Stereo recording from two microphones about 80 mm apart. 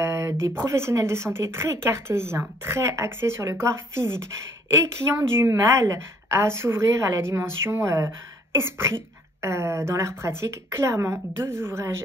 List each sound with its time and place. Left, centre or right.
0.0 s a sound: right
0.7 s speech: right
5.6 s speech: right